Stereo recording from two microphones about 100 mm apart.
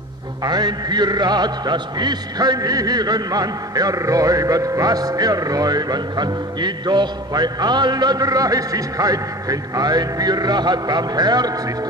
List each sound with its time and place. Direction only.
0.4 s a man's voice: 45° right (ahead or behind)